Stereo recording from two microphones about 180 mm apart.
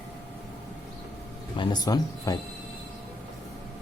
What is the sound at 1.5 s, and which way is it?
Speech, 25° left (ahead or behind).